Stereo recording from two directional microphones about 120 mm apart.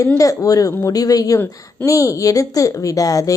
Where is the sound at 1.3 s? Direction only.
20° left (ahead or behind).